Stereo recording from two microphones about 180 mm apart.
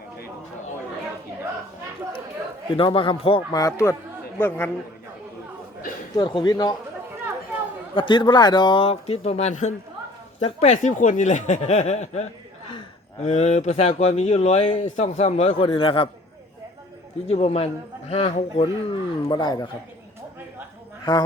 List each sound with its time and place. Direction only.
2.7 s speech: 30° left (ahead or behind); by 4.7 s 10° left (ahead or behind)
6.1 s speech: 25° left (ahead or behind)
7.9 s speech: 25° left (ahead or behind)
17.2 s speech: 35° left (ahead or behind)
21.0 s a woman's voice: 25° left (ahead or behind)